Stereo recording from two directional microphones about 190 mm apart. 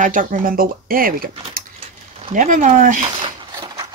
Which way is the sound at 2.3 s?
40° right (ahead or behind).